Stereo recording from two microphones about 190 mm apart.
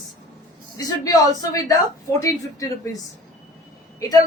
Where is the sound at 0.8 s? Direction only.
20° left (ahead or behind).